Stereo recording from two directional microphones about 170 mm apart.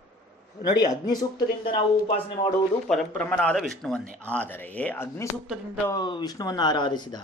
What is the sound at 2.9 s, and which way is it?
A man's voice, 5° left (ahead or behind).